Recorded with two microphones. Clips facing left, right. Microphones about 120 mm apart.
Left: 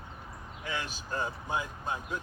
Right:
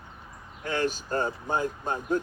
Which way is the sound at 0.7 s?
45° right (ahead or behind).